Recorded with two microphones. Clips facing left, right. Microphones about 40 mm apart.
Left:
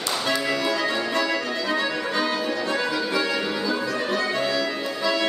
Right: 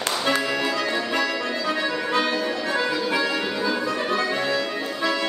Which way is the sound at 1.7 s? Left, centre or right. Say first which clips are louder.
Left 1 dB; centre.